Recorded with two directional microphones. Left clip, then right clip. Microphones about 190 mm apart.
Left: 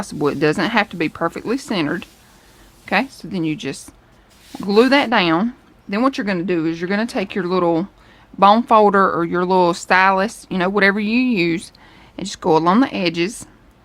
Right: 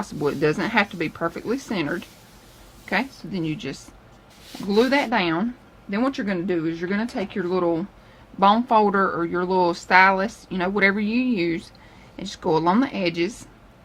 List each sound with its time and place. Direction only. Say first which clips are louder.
0.0 s speech: left 4 dB; 50° left (ahead or behind)